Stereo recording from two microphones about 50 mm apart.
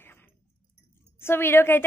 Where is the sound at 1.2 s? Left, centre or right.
Left.